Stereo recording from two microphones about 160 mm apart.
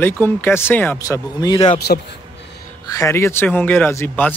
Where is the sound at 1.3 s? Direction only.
25° left (ahead or behind).